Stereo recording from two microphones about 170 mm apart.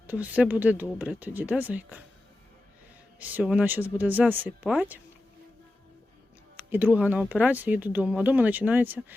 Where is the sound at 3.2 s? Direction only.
10° right (ahead or behind).